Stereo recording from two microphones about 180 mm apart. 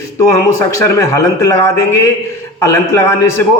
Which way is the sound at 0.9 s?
15° left (ahead or behind).